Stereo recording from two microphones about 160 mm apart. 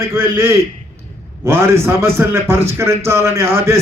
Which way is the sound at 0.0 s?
15° right (ahead or behind).